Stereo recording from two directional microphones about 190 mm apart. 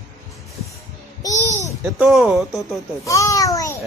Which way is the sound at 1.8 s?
5° right (ahead or behind).